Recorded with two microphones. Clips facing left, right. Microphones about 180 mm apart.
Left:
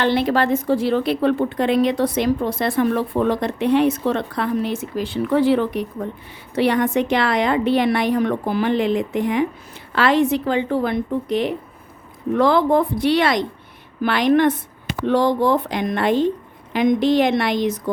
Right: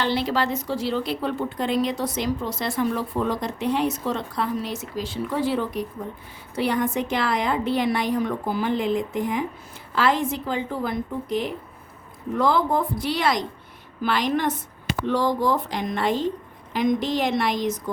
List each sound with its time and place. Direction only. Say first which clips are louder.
0.0 s a woman's voice: left 5 dB; 55° left (ahead or behind)